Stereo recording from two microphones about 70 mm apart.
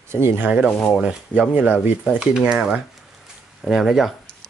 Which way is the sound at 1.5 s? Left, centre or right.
Right.